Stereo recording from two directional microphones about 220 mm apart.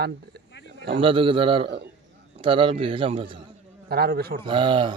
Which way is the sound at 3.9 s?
45° right (ahead or behind).